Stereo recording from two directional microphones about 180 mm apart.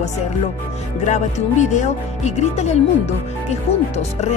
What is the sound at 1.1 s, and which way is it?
Speech, 40° left (ahead or behind).